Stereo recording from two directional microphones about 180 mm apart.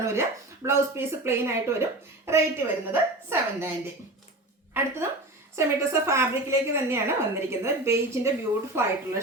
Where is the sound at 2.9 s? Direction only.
15° right (ahead or behind).